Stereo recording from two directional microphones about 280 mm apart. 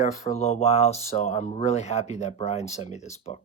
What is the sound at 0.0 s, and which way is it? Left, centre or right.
Speech, left.